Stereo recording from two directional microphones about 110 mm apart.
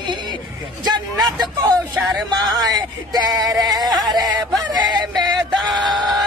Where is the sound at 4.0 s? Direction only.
40° right (ahead or behind).